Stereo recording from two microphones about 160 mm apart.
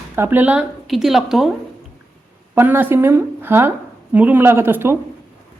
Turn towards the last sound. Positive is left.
turn(degrees=-15)  # may be behind; listen again after turning